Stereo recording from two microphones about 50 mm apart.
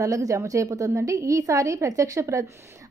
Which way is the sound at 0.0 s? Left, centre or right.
Right.